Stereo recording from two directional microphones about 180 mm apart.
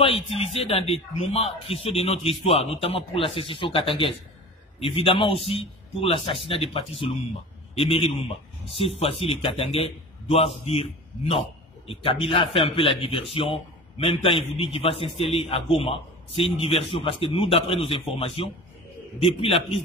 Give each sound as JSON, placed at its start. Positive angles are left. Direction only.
{"t": 0.0, "sound": "a man's voice", "side_deg": 35}